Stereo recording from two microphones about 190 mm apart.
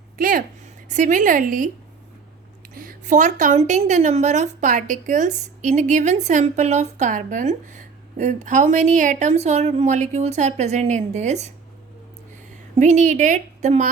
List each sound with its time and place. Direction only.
0.2 s a sound: 45° right (ahead or behind)
2.7 s speech: 45° right (ahead or behind)
12.8 s speech: 40° right (ahead or behind)